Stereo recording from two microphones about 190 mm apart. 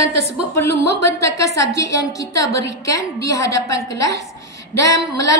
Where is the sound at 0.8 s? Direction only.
15° left (ahead or behind).